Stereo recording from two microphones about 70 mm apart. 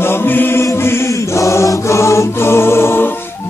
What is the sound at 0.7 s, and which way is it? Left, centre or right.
Chant, left.